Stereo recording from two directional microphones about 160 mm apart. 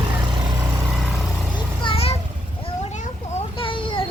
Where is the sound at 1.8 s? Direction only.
40° left (ahead or behind).